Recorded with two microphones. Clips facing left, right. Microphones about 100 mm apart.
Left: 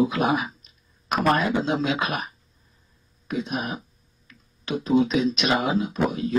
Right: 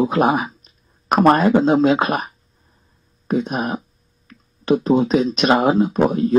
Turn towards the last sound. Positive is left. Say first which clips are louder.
# right 8 dB
turn(degrees=-40)  # may be behind; listen again after turning